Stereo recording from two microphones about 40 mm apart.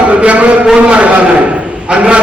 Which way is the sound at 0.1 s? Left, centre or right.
Right.